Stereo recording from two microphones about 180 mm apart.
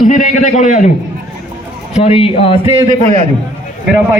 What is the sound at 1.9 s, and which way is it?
Speech, 35° left (ahead or behind).